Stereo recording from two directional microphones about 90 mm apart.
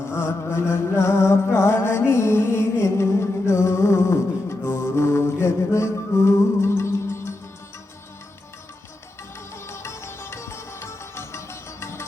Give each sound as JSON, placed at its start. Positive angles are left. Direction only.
{"t": 0.1, "sound": "music", "side_deg": 30}
{"t": 9.6, "sound": "music", "side_deg": 30}